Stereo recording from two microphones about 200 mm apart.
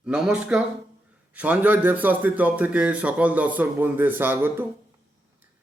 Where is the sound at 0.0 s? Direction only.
5° right (ahead or behind).